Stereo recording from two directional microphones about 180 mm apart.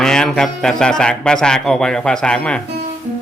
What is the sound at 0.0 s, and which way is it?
A man's voice, 5° left (ahead or behind).